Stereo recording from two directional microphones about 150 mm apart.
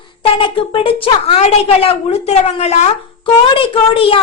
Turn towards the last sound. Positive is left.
turn(degrees=35)  # may be behind; listen again after turning